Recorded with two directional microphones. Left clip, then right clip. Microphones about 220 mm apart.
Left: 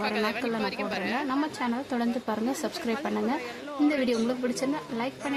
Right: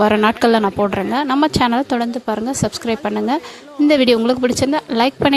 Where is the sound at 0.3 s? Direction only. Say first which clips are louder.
Right 15 dB; 45° right (ahead or behind).